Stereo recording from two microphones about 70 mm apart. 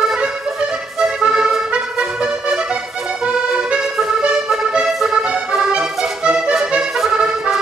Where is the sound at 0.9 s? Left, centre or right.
Centre.